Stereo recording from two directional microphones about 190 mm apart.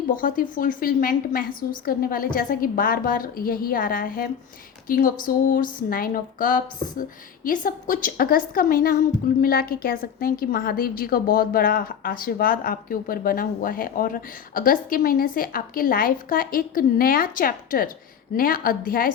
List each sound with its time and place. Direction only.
0.1 s a woman's voice: 45° left (ahead or behind)